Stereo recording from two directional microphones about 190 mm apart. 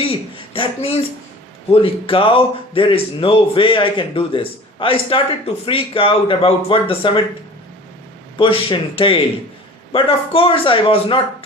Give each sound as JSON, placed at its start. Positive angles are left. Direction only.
{"t": 0.0, "sound": "a sound", "side_deg": 30}
{"t": 1.7, "sound": "a man's voice", "side_deg": 30}
{"t": 8.4, "sound": "a man's voice", "side_deg": 25}